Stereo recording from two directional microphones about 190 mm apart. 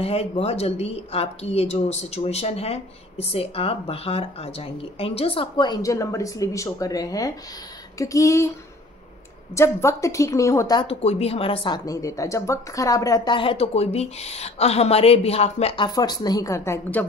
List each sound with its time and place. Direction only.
0.0 s speech: 30° left (ahead or behind)
8.0 s a sound: 15° left (ahead or behind)
9.6 s a woman's voice: 15° left (ahead or behind)